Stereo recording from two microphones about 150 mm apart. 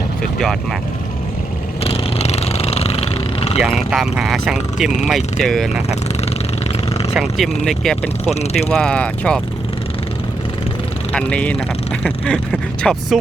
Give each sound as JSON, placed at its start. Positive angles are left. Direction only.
{"t": 0.2, "sound": "speech", "side_deg": 0}
{"t": 1.8, "sound": "a sound", "side_deg": 40}
{"t": 3.6, "sound": "speech", "side_deg": -5}
{"t": 7.2, "sound": "speech", "side_deg": 0}
{"t": 8.3, "sound": "speech", "side_deg": 45}
{"t": 8.7, "sound": "speech", "side_deg": 5}
{"t": 11.1, "sound": "speech", "side_deg": 5}